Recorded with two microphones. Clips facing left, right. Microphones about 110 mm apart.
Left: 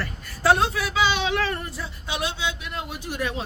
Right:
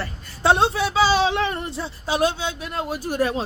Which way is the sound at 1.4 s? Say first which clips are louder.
Right 3 dB; 20° right (ahead or behind).